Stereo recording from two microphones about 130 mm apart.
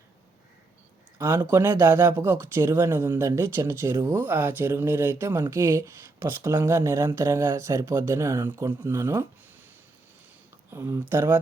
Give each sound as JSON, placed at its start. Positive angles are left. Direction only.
{"t": 1.2, "sound": "speech", "side_deg": -25}
{"t": 10.7, "sound": "speech", "side_deg": -20}